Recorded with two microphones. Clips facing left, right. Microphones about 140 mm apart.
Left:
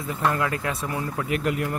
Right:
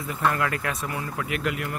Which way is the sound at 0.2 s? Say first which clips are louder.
Even; 15° left (ahead or behind).